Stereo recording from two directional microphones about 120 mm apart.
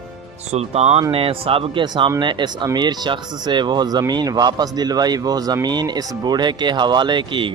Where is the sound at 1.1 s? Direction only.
50° right (ahead or behind).